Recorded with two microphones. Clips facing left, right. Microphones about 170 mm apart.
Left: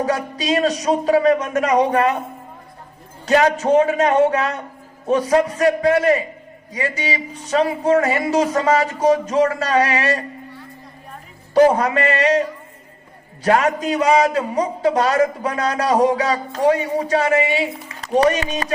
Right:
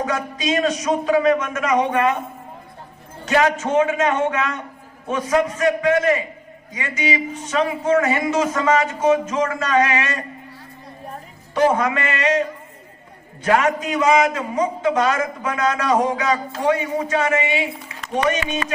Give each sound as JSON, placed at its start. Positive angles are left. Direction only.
{"t": 0.0, "sound": "a man's voice", "side_deg": 35}
{"t": 3.2, "sound": "a man's voice", "side_deg": 35}
{"t": 11.5, "sound": "a man's voice", "side_deg": 35}